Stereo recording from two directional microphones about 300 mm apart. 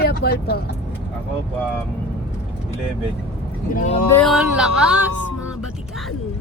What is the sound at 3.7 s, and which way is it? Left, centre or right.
Speech, left.